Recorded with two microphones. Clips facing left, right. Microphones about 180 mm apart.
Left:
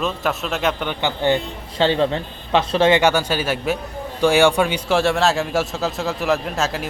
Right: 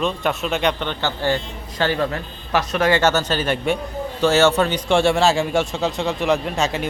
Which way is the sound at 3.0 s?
10° left (ahead or behind).